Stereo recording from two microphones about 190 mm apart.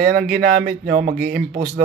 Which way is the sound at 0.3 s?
50° right (ahead or behind).